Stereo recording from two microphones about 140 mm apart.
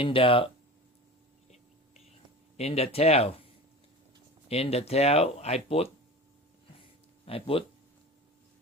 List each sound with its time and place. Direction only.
0.0 s speech: 40° left (ahead or behind)
2.6 s speech: 50° left (ahead or behind)
7.3 s speech: 40° left (ahead or behind)